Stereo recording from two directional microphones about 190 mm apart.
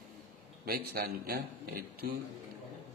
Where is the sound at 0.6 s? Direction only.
50° right (ahead or behind).